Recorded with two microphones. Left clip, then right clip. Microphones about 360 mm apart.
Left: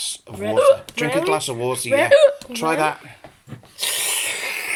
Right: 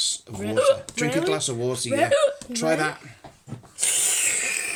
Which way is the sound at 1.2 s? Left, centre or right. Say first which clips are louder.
Left 4 dB; centre.